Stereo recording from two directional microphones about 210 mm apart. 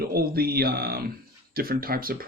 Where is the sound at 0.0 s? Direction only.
45° right (ahead or behind).